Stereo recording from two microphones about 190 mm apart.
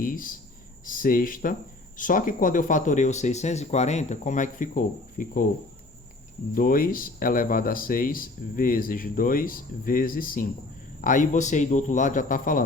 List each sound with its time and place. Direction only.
0.0 s speech: 45° left (ahead or behind)
6.5 s speech: 45° left (ahead or behind)